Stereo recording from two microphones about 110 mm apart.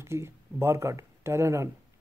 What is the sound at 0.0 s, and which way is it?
Speech, 25° right (ahead or behind).